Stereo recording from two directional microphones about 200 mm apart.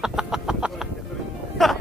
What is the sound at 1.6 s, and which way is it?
Music, centre (ahead or behind).